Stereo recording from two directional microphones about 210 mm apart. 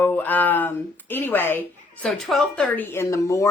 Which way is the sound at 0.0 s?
10° left (ahead or behind).